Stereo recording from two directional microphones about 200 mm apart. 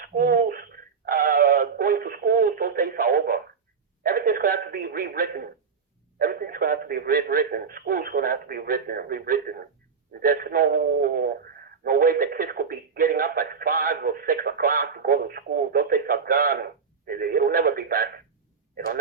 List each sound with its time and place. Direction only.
0.0 s a sound: 45° right (ahead or behind)
1.0 s synthetic singing: 45° right (ahead or behind)
4.0 s telephone: 45° right (ahead or behind)
6.1 s speech: 45° right (ahead or behind)